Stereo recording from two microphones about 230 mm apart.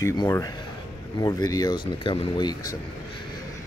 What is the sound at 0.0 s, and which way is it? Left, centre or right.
Speech, centre.